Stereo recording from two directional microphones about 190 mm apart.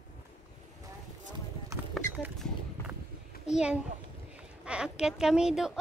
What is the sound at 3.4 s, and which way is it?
Speech, 5° right (ahead or behind).